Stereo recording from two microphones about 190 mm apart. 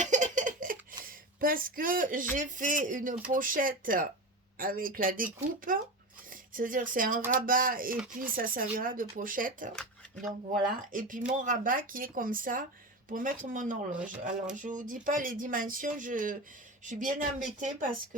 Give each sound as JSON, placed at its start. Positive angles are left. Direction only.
{"t": 0.0, "sound": "giggle", "side_deg": -40}
{"t": 1.0, "sound": "speech", "side_deg": -50}
{"t": 10.9, "sound": "speech", "side_deg": -45}